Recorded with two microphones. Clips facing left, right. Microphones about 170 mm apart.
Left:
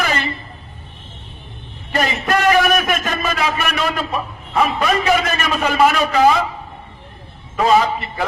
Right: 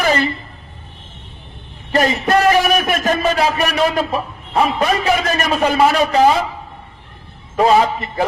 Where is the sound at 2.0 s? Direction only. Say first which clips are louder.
Right 4 dB; 35° right (ahead or behind).